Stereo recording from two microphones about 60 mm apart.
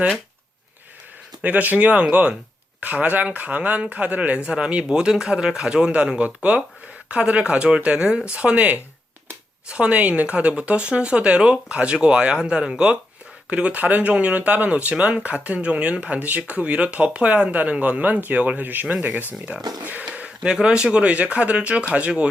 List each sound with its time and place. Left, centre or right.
1.4 s speech: right
19.8 s a sound: right
20.1 s speech: centre